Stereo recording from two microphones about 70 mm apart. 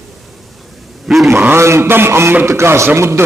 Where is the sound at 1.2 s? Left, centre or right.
Right.